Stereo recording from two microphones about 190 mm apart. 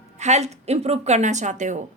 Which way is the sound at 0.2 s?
35° right (ahead or behind).